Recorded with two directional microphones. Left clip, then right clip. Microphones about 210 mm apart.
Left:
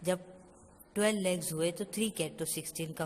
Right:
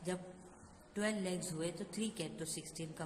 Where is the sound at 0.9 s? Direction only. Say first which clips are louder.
Left 9 dB; 35° left (ahead or behind).